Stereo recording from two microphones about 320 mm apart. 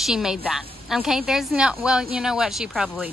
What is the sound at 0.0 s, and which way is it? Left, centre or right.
A woman's voice, centre.